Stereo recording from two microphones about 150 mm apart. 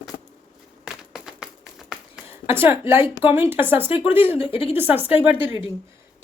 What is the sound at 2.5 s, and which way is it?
A woman's voice, 15° right (ahead or behind).